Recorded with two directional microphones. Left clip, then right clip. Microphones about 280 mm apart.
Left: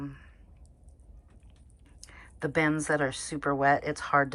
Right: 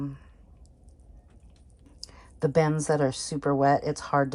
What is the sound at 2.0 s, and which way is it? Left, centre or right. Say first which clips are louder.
Speech: right 6 dB; right.